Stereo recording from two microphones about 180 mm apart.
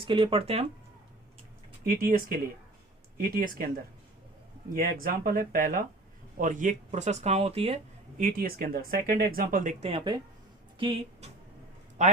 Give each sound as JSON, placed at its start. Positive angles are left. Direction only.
{"t": 0.0, "sound": "speech", "side_deg": -30}
{"t": 1.8, "sound": "speech", "side_deg": -55}
{"t": 4.7, "sound": "speech", "side_deg": -50}
{"t": 8.2, "sound": "speech", "side_deg": -50}
{"t": 9.8, "sound": "speech", "side_deg": -25}
{"t": 12.0, "sound": "a man's voice", "side_deg": -40}